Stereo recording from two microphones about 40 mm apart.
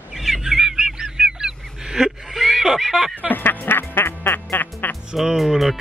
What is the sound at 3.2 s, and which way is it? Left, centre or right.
Music, left.